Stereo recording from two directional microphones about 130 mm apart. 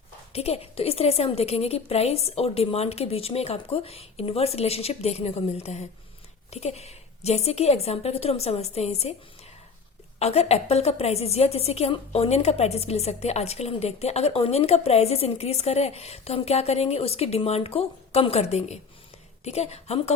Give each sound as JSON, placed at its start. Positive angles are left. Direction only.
{"t": 0.3, "sound": "a woman's voice", "side_deg": 50}
{"t": 10.2, "sound": "a woman's voice", "side_deg": 55}